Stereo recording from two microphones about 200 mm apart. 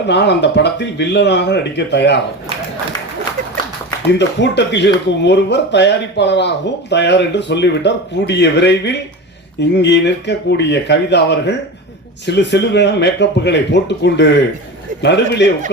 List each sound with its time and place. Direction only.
0.1 s speech: 60° left (ahead or behind)
4.0 s speech: 60° left (ahead or behind)